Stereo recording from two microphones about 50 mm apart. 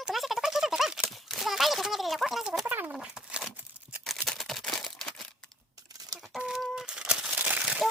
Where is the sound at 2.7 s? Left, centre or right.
Right.